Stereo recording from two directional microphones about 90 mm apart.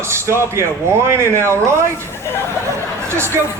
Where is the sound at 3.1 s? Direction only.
30° right (ahead or behind).